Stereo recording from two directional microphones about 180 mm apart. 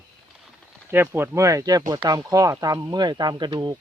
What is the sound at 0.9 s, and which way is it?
Speech, 10° right (ahead or behind).